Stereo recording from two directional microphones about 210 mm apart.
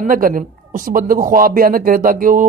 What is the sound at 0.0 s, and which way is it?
Speech, 40° right (ahead or behind).